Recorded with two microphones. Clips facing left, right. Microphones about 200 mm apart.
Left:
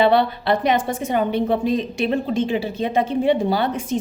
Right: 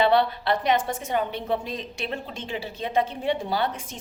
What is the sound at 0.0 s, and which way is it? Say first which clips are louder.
A woman's voice: left 4 dB; 10° left (ahead or behind).